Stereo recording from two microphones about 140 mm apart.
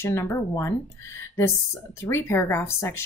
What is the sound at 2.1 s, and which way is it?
Speech, 20° left (ahead or behind).